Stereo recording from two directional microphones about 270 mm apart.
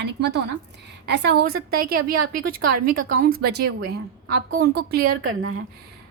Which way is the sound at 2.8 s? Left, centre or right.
Right.